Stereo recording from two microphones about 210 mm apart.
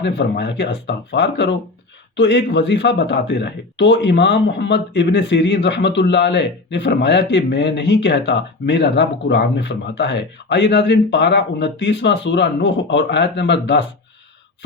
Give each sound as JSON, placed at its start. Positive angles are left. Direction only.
{"t": 0.0, "sound": "speech", "side_deg": 55}